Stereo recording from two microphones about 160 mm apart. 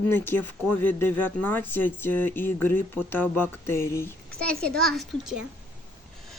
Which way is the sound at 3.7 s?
15° left (ahead or behind).